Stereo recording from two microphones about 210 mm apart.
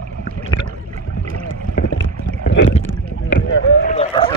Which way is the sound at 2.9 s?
60° left (ahead or behind).